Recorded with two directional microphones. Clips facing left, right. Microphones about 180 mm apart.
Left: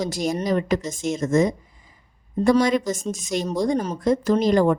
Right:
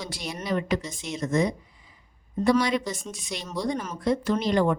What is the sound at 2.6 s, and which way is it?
Speech, 45° left (ahead or behind).